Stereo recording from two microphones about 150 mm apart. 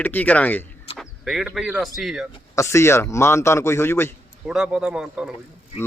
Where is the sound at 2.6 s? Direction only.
20° left (ahead or behind).